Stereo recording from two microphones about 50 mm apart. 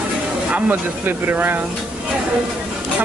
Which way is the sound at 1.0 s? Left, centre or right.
Right.